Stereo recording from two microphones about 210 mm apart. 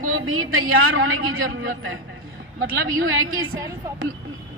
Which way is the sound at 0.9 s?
65° right (ahead or behind).